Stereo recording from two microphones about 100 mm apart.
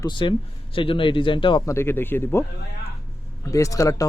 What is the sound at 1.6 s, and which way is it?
Speech, 25° left (ahead or behind).